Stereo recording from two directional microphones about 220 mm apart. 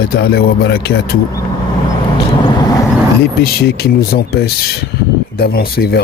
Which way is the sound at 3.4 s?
45° left (ahead or behind).